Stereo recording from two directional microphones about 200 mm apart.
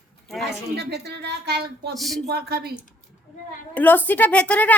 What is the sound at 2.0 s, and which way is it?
Speech, centre (ahead or behind).